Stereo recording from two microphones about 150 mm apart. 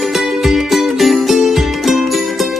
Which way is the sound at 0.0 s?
Centre (ahead or behind).